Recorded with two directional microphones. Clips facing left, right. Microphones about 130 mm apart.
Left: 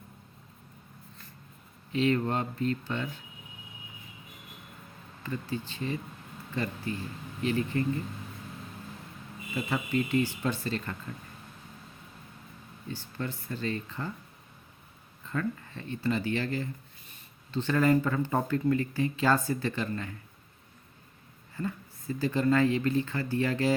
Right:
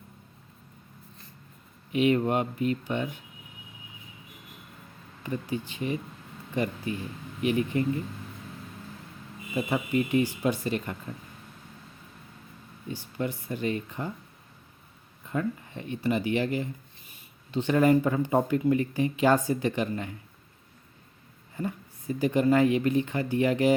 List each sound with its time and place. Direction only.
1.9 s a woman's voice: 15° right (ahead or behind)
5.2 s a woman's voice: 15° right (ahead or behind)
9.6 s a woman's voice: 15° right (ahead or behind)
12.9 s a woman's voice: 15° right (ahead or behind)
15.3 s a woman's voice: 20° right (ahead or behind)
21.5 s a woman's voice: 15° right (ahead or behind)